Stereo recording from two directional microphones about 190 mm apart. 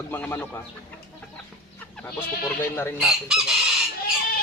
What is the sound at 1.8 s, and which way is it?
Speech, 5° left (ahead or behind).